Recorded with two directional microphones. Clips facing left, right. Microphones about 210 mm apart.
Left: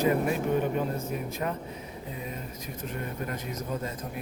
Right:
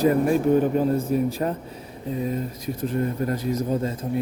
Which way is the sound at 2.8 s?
35° right (ahead or behind).